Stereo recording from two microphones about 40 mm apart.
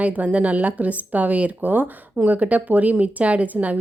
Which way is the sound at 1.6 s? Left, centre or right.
Right.